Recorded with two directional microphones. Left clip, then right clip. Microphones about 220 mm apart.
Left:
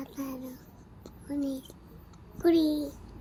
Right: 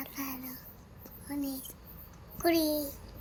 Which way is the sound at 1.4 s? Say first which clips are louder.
Left 5 dB; 50° right (ahead or behind).